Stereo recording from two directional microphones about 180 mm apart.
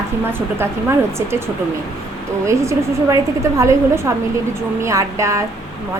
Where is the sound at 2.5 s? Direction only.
15° right (ahead or behind).